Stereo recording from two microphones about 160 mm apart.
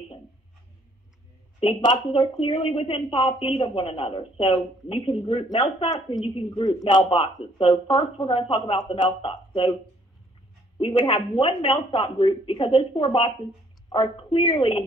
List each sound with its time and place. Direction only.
1.6 s a woman's voice: 30° left (ahead or behind)
10.8 s a woman's voice: 30° left (ahead or behind)